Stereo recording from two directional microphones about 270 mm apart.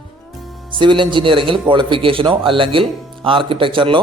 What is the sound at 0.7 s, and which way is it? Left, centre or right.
A man's voice, centre.